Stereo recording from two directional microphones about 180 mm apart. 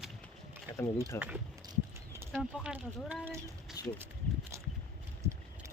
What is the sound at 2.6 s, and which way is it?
Speech, 5° right (ahead or behind).